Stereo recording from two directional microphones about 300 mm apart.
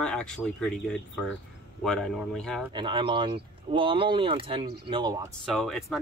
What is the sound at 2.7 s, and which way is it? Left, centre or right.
Speech, centre.